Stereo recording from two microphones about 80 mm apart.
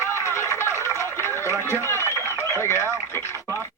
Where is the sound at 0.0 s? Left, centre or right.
Left.